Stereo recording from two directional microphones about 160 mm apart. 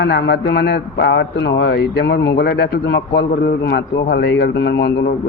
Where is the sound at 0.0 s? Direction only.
90° left.